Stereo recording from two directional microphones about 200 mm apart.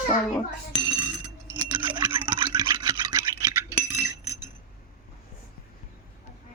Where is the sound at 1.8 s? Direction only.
25° right (ahead or behind).